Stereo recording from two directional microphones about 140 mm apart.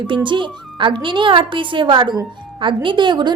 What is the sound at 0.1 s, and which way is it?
A woman's voice, 35° right (ahead or behind).